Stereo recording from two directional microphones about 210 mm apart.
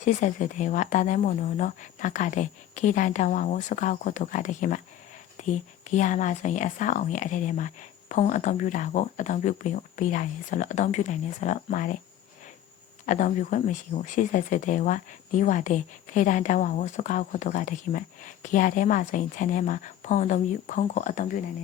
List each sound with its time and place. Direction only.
0.0 s speech: 35° left (ahead or behind)
13.1 s speech: 35° left (ahead or behind)